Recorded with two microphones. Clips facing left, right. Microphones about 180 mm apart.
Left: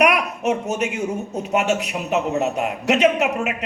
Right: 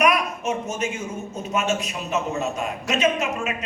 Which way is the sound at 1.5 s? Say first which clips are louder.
Left 4 dB; 70° left (ahead or behind).